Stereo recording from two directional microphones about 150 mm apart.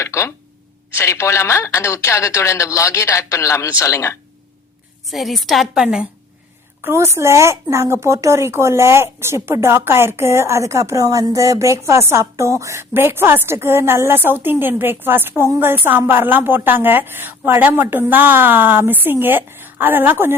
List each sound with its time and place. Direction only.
0.0 s a sound: 15° left (ahead or behind)
0.9 s speech: 20° left (ahead or behind)
5.0 s a woman's voice: centre (ahead or behind)
6.8 s speech: 15° right (ahead or behind)